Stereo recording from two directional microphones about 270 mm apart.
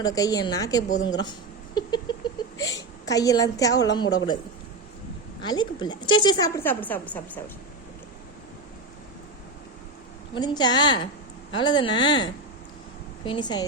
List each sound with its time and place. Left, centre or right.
0.0 s a woman's voice: centre
0.9 s a woman's voice: left
1.7 s a sound: centre
2.6 s hiccup: centre
3.8 s a woman's voice: centre
5.4 s a woman's voice: centre
10.3 s a woman's voice: centre